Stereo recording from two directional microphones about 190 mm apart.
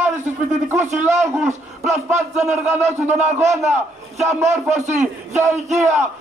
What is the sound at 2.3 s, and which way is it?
Speech, 35° right (ahead or behind).